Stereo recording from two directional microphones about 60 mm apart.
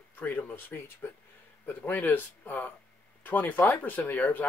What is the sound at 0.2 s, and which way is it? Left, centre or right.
Speech, left.